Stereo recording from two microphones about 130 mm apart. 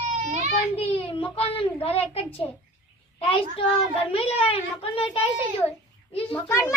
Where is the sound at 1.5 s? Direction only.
45° left (ahead or behind).